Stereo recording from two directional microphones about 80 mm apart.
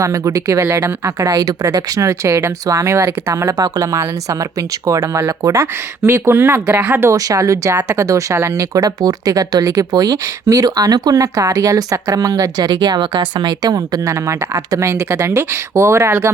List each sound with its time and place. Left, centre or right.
0.0 s speech: right
1.2 s speech: right
1.7 s speech: right
3.3 s speech: right
7.1 s speech: right